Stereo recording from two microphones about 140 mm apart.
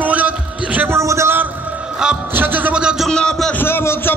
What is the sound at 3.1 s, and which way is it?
Speech, 5° left (ahead or behind).